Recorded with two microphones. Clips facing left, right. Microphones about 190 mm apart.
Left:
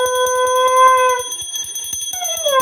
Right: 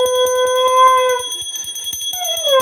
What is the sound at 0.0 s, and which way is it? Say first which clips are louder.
Music: right 3 dB; 15° right (ahead or behind).